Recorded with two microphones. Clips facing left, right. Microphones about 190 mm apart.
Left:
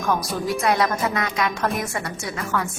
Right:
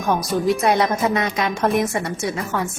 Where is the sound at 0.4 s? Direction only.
25° right (ahead or behind).